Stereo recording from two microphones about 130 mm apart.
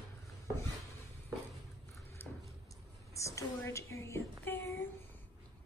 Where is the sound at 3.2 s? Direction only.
25° left (ahead or behind).